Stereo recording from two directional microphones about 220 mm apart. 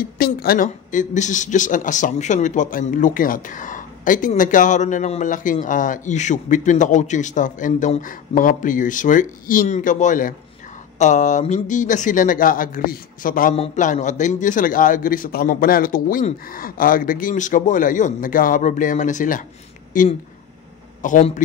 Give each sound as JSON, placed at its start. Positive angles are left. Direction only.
{"t": 0.0, "sound": "a woman's voice", "side_deg": 40}